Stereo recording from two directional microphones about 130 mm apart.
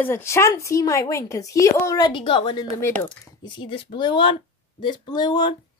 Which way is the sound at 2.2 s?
40° left (ahead or behind).